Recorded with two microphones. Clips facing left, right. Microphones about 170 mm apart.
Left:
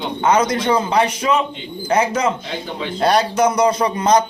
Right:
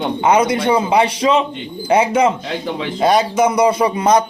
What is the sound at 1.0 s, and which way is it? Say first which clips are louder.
Speech: right 3 dB; 30° right (ahead or behind).